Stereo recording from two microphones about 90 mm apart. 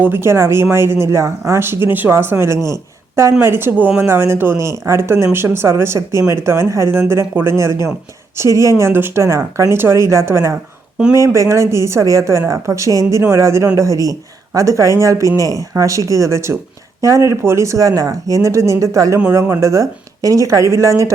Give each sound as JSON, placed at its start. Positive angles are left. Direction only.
{"t": 0.0, "sound": "speech", "side_deg": -25}